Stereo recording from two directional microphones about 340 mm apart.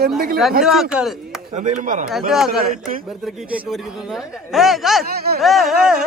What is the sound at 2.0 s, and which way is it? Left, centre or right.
Speech, centre.